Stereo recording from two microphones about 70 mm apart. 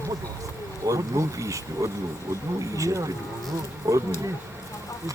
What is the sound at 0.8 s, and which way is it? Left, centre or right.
Speech, right.